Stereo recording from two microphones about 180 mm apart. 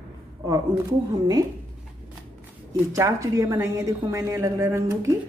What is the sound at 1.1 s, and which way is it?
Speech, 20° right (ahead or behind).